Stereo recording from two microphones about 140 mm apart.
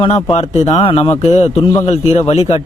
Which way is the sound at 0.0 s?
45° left (ahead or behind).